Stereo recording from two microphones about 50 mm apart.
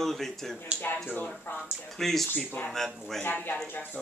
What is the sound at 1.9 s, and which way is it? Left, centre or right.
Speech, centre.